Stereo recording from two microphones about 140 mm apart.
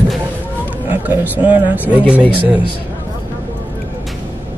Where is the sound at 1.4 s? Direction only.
10° right (ahead or behind).